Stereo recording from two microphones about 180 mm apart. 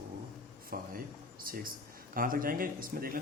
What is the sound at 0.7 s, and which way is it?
A man's voice, 55° right (ahead or behind).